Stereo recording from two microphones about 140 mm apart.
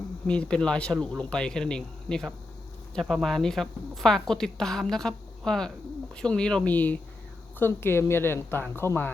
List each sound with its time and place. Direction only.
0.3 s a woman's voice: 5° left (ahead or behind)